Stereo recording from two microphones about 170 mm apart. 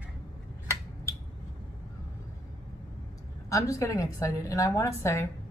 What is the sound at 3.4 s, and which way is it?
A woman's voice, 20° left (ahead or behind).